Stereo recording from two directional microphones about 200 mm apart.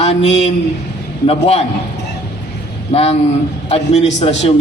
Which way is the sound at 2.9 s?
30° left (ahead or behind).